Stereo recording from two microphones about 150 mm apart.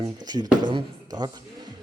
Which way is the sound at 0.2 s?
25° right (ahead or behind).